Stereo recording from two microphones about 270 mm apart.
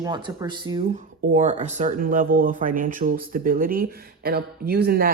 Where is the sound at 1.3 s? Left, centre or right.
Right.